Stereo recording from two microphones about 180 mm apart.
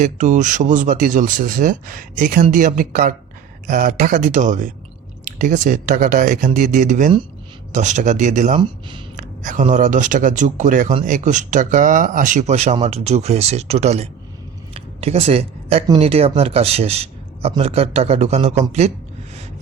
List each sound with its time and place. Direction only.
0.0 s speech: 45° right (ahead or behind)
14.7 s a sound: 35° right (ahead or behind)
16.0 s a man's voice: 35° right (ahead or behind)